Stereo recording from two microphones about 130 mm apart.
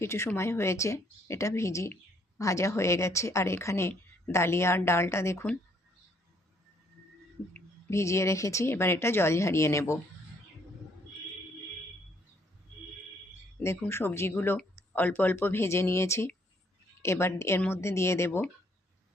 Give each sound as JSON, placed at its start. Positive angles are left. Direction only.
{"t": 0.0, "sound": "a woman's voice", "side_deg": 20}
{"t": 7.9, "sound": "a woman's voice", "side_deg": 20}
{"t": 13.6, "sound": "a woman's voice", "side_deg": 20}